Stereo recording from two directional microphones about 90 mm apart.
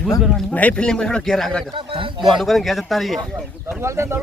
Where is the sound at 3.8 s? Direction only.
30° right (ahead or behind).